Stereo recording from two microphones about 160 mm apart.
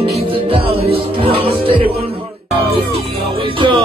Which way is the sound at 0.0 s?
35° right (ahead or behind).